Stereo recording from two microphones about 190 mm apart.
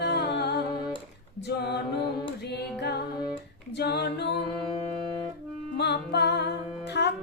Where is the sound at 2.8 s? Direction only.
60° left (ahead or behind).